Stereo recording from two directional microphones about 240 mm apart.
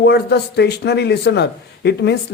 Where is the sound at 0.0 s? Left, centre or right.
Left.